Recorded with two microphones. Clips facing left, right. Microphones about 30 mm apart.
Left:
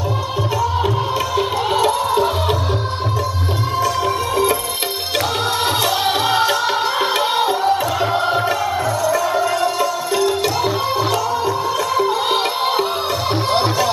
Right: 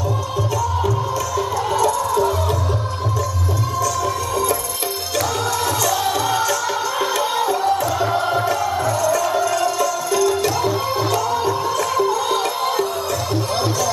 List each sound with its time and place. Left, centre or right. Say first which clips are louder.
1.8 s music: left 1 dB; left
5.1 s music: left 2 dB; left
11.1 s music: left 1 dB; centre
12.1 s music: left 2 dB; left